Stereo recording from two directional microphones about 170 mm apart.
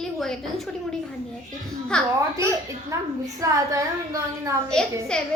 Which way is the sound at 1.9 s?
5° left (ahead or behind).